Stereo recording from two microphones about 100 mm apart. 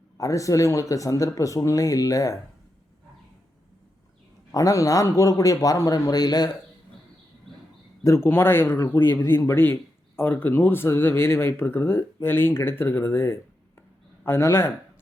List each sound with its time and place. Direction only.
0.2 s speech: 35° left (ahead or behind)
4.5 s speech: 35° left (ahead or behind)
8.0 s speech: 25° left (ahead or behind)